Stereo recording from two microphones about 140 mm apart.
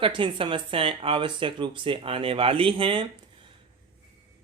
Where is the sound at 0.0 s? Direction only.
35° right (ahead or behind).